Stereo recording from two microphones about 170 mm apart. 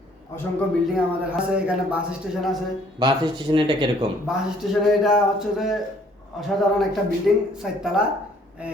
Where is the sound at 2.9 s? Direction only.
25° right (ahead or behind).